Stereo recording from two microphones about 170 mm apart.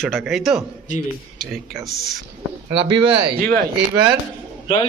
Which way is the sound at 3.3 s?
60° right (ahead or behind).